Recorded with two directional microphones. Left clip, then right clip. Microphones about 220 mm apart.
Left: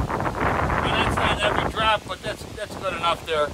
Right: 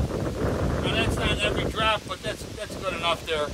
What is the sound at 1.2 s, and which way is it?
Wind noise, 10° left (ahead or behind).